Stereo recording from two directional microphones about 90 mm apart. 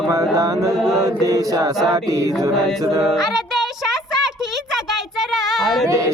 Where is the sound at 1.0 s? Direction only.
40° right (ahead or behind).